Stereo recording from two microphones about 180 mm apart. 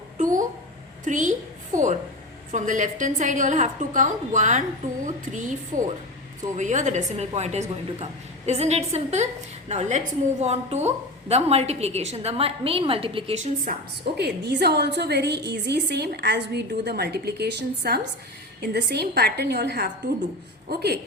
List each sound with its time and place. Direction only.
0.2 s a sound: 45° right (ahead or behind)
1.0 s a woman's voice: 45° right (ahead or behind)
6.6 s a woman's voice: 45° right (ahead or behind)
14.2 s a woman's voice: 65° right (ahead or behind)